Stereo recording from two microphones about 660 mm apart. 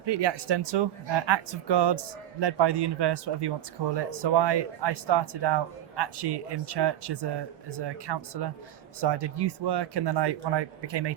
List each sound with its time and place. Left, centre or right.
0.0 s speech: right